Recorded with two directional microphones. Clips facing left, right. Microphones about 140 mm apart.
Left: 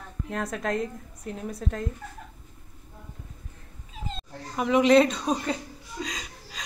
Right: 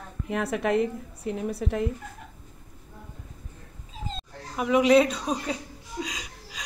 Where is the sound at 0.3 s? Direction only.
5° right (ahead or behind).